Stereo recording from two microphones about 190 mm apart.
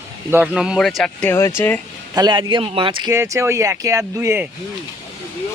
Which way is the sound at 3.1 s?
15° right (ahead or behind).